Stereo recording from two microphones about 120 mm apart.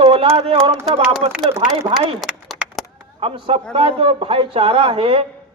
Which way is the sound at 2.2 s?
Centre (ahead or behind).